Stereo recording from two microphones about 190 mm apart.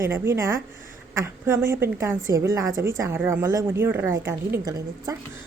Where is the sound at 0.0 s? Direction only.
15° right (ahead or behind).